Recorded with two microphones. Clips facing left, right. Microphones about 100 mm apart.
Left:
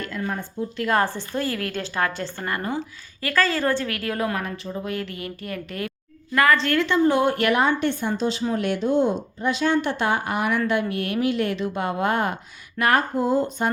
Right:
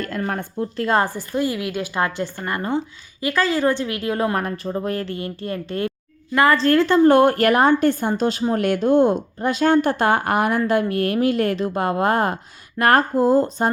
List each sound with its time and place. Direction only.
0.0 s a sound: 40° right (ahead or behind)
0.3 s speech: 60° right (ahead or behind)
0.8 s a woman's voice: 25° right (ahead or behind)
1.0 s a woman's voice: 15° right (ahead or behind)
4.4 s a woman's voice: 45° right (ahead or behind)
7.0 s a woman's voice: 55° right (ahead or behind); by 13.7 s 35° right (ahead or behind)